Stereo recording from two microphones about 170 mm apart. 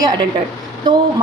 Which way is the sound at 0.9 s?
25° right (ahead or behind).